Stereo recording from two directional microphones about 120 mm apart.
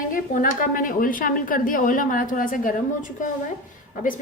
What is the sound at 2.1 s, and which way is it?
Speech, 90° left.